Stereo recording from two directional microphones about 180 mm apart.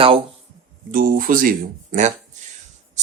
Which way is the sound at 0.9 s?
50° right (ahead or behind).